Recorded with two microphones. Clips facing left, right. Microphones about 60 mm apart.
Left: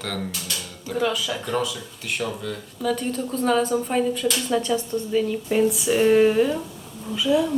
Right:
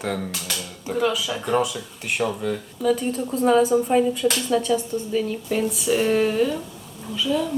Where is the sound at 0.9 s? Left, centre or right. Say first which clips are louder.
Right 1 dB; centre.